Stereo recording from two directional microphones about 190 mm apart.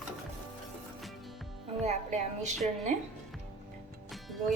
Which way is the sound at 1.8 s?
35° right (ahead or behind).